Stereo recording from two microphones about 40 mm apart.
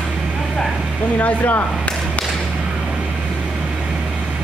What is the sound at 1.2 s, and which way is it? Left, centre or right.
Speech, left.